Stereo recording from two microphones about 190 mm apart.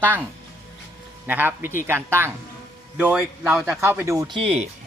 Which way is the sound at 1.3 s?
10° right (ahead or behind).